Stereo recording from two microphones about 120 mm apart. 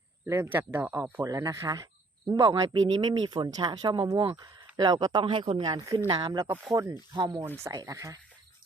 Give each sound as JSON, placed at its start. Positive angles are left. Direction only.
{"t": 0.3, "sound": "speech", "side_deg": -20}
{"t": 6.1, "sound": "speech", "side_deg": -35}